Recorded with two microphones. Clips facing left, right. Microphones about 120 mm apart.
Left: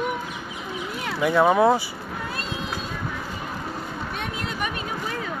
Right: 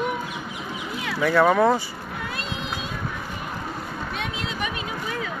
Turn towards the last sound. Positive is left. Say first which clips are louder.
# even
turn(degrees=50)  # may be behind; listen again after turning